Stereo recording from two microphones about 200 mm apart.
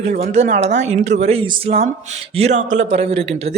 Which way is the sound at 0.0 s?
35° right (ahead or behind).